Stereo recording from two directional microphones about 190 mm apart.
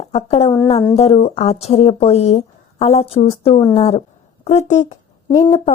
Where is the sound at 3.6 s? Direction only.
30° left (ahead or behind).